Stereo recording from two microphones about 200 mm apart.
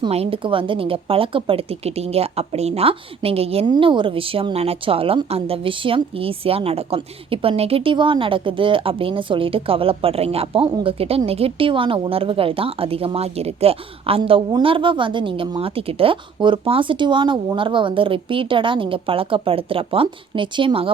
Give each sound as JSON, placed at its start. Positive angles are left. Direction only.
{"t": 0.0, "sound": "speech", "side_deg": -30}